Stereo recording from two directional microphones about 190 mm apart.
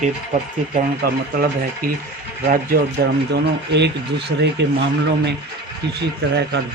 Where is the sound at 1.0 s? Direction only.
50° right (ahead or behind).